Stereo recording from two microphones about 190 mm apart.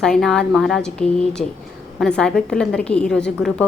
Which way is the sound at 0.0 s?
Centre (ahead or behind).